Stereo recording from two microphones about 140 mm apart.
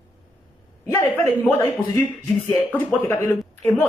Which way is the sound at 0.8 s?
20° left (ahead or behind).